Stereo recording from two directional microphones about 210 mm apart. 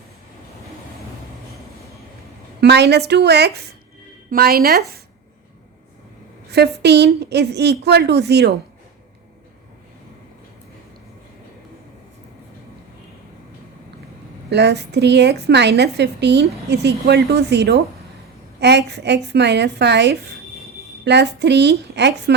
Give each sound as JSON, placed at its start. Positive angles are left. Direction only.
{"t": 2.6, "sound": "a woman's voice", "side_deg": -50}
{"t": 6.5, "sound": "a woman's voice", "side_deg": -50}
{"t": 14.5, "sound": "a woman's voice", "side_deg": -55}